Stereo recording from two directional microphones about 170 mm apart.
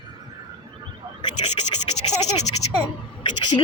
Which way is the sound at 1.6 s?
30° left (ahead or behind).